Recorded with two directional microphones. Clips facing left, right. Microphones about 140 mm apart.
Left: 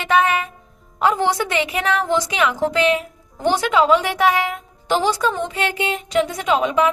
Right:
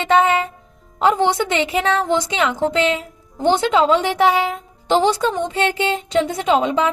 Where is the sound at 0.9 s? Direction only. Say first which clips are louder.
Right 2 dB; 25° right (ahead or behind).